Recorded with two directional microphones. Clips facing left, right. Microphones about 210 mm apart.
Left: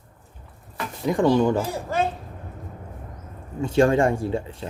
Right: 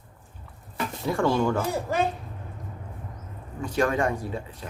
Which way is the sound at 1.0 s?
20° left (ahead or behind).